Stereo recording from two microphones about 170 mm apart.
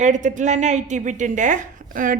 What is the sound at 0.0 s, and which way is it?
A woman's voice, 45° right (ahead or behind).